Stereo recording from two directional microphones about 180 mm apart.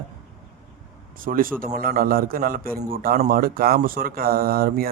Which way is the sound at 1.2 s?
50° right (ahead or behind).